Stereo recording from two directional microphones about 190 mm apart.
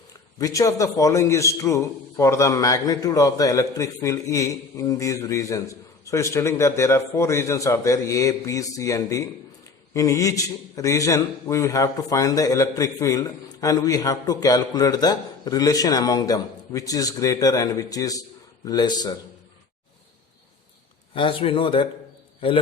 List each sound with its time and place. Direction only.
0.3 s a man's voice: 20° left (ahead or behind)
21.2 s speech: 25° left (ahead or behind)